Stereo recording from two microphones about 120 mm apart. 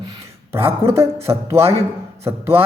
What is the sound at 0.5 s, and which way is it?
Speech, 20° right (ahead or behind).